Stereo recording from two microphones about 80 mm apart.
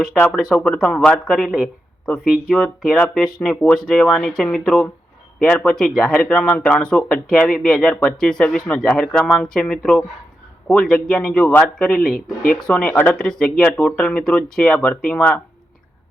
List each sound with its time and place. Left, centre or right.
0.0 s speech: centre
1.1 s speech: centre
2.5 s speech: centre
12.9 s speech: left
13.1 s speech: centre